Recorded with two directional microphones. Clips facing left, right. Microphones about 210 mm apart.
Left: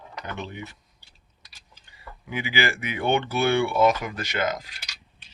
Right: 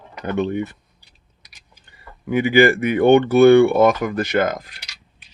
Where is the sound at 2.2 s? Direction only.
50° right (ahead or behind).